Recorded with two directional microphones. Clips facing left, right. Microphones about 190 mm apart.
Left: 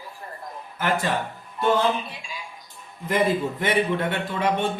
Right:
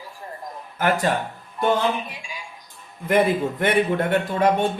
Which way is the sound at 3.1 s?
55° right (ahead or behind).